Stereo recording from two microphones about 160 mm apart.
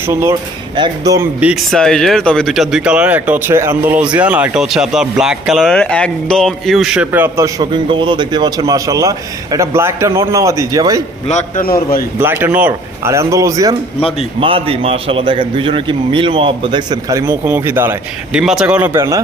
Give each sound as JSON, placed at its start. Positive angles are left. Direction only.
{"t": 0.1, "sound": "a man's voice", "side_deg": -15}
{"t": 1.7, "sound": "a man's voice", "side_deg": 5}
{"t": 11.3, "sound": "a man's voice", "side_deg": 45}
{"t": 11.6, "sound": "a man's voice", "side_deg": 65}
{"t": 12.2, "sound": "speech", "side_deg": -15}
{"t": 14.4, "sound": "a man's voice", "side_deg": -35}
{"t": 18.9, "sound": "a man's voice", "side_deg": -20}